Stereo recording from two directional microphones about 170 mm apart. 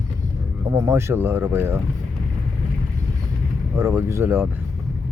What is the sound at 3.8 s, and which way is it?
Speech, 15° right (ahead or behind).